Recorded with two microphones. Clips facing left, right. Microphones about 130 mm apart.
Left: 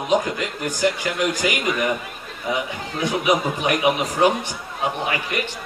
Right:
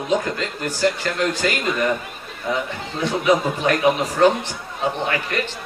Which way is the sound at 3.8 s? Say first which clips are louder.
Right 2 dB; centre (ahead or behind).